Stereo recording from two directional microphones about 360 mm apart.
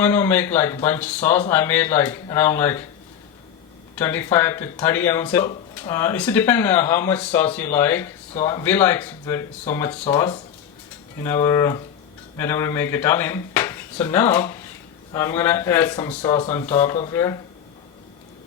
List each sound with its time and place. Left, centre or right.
0.0 s speech: centre
3.9 s speech: centre